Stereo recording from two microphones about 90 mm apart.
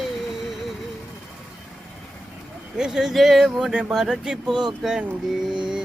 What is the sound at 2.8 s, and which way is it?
Speech, 5° right (ahead or behind).